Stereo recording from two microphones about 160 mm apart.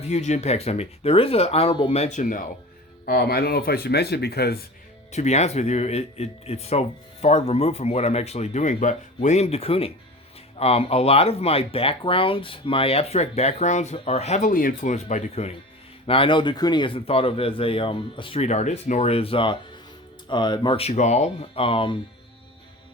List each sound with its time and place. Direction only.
0.0 s speech: 45° left (ahead or behind)
3.1 s speech: 75° left (ahead or behind)
5.1 s speech: 45° left (ahead or behind)